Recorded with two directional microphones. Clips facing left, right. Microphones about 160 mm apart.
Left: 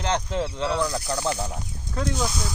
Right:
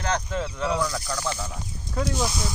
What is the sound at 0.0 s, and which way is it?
Speech, 20° left (ahead or behind).